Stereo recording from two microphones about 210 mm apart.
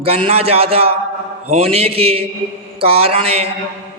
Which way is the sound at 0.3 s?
30° right (ahead or behind).